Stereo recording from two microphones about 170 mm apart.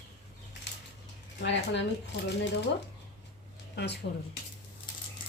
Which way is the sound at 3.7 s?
85° left.